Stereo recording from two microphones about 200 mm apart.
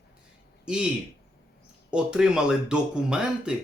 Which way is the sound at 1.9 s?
5° right (ahead or behind).